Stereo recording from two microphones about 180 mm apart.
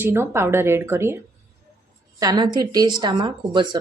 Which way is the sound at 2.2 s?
20° right (ahead or behind).